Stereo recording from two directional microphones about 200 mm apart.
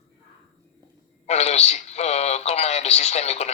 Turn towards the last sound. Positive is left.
turn(degrees=35)  # may be behind; listen again after turning